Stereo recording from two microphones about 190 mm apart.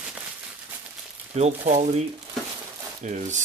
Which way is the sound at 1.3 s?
35° right (ahead or behind).